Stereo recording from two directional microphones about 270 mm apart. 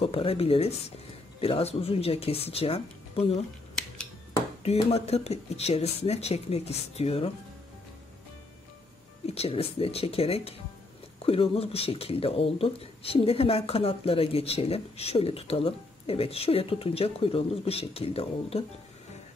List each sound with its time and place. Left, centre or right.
0.0 s speech: left
4.6 s speech: left
9.2 s speech: left